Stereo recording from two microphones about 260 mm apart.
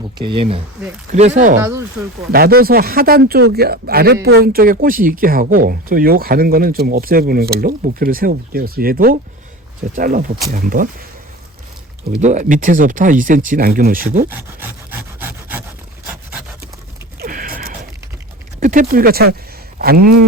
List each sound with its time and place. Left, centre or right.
0.2 s speech: centre
1.5 s speech: centre
2.3 s speech: right
12.0 s speech: right
14.3 s rub: centre
17.2 s a sound: right
18.6 s speech: right